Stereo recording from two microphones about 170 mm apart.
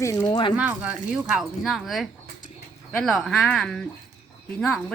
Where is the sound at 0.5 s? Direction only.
5° right (ahead or behind).